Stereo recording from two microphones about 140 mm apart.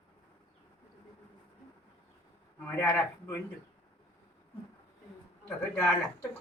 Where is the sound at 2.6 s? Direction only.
15° left (ahead or behind).